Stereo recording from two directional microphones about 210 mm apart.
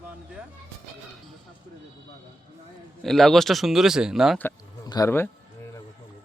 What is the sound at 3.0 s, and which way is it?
Speech, centre (ahead or behind).